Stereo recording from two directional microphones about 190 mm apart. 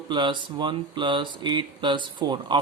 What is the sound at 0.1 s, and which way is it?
Speech, 25° right (ahead or behind).